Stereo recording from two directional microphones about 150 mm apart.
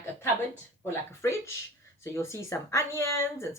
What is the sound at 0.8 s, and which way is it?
Speech, 20° left (ahead or behind).